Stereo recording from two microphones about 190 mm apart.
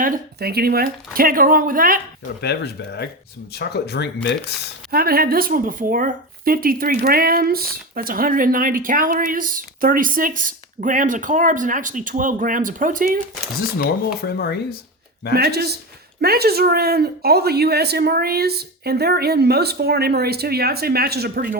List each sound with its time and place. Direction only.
0.0 s speech: 55° right (ahead or behind)
2.4 s speech: 60° left (ahead or behind)
4.9 s speech: 50° right (ahead or behind)
13.6 s speech: 60° left (ahead or behind)
15.4 s speech: 55° right (ahead or behind)